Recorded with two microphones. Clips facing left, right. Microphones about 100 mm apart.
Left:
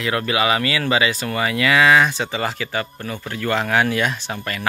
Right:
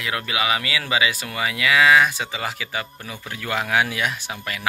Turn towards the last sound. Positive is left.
turn(degrees=-5)  # may be behind; listen again after turning